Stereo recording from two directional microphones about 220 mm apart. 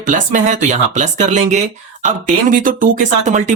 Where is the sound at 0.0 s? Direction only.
35° right (ahead or behind).